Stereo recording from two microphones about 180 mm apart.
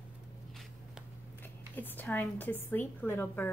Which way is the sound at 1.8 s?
10° left (ahead or behind).